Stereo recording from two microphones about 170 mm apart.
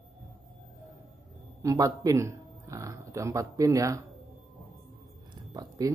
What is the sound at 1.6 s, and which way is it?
Speech, 20° right (ahead or behind).